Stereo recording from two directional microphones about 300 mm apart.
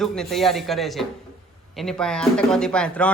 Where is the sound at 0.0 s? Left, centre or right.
Centre.